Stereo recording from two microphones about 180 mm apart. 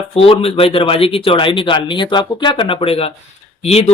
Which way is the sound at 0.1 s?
30° left (ahead or behind).